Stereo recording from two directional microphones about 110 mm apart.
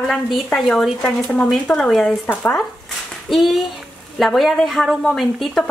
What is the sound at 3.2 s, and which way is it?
Speech, centre (ahead or behind).